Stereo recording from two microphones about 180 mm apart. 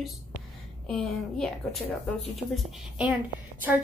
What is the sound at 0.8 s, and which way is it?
A woman's voice, 5° left (ahead or behind).